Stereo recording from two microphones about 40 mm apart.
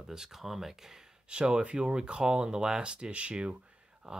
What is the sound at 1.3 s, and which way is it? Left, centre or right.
Speech, right.